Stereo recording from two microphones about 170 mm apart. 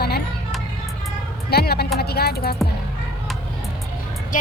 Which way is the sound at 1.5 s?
65° left (ahead or behind).